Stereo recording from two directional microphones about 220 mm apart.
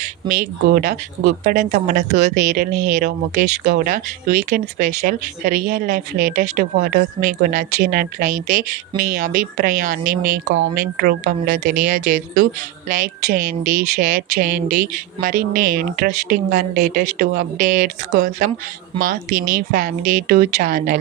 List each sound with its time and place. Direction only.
0.0 s speech: 35° right (ahead or behind)